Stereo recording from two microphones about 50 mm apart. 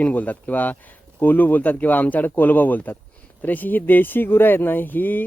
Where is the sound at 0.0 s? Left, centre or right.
Left.